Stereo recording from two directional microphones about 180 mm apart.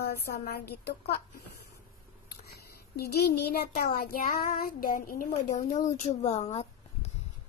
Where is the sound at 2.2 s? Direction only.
60° left (ahead or behind).